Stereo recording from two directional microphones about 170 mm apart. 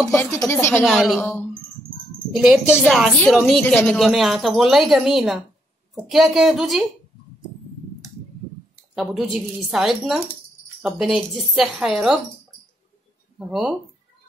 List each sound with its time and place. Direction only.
0.1 s speech: 15° left (ahead or behind)
0.8 s speech: 5° right (ahead or behind)
2.3 s speech: centre (ahead or behind)
8.9 s speech: centre (ahead or behind)
13.4 s speech: centre (ahead or behind)